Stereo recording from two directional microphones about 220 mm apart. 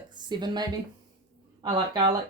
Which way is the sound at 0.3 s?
20° right (ahead or behind).